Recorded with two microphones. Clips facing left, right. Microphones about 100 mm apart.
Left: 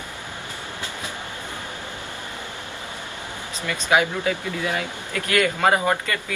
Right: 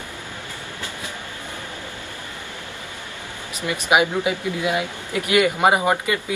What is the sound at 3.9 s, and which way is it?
Speech, 15° right (ahead or behind).